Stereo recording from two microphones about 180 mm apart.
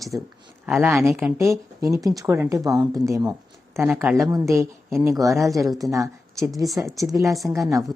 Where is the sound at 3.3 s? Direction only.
15° right (ahead or behind).